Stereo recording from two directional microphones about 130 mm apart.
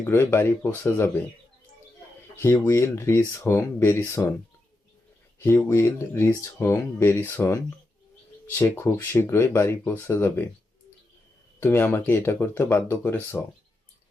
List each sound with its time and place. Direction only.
0.0 s speech: 20° left (ahead or behind)
2.3 s speech: 20° left (ahead or behind)
5.4 s speech: 20° left (ahead or behind)
11.6 s speech: 15° left (ahead or behind)